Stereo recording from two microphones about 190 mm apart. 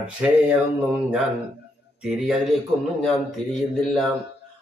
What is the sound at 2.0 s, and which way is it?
A man's voice, 5° right (ahead or behind).